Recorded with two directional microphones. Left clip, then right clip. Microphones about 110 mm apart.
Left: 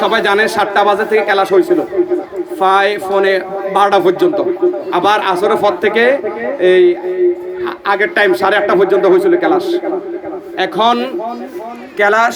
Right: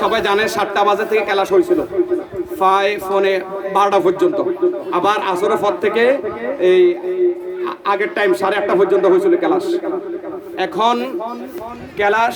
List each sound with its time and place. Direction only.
0.0 s speech: 5° right (ahead or behind)
11.9 s a man's voice: 20° left (ahead or behind)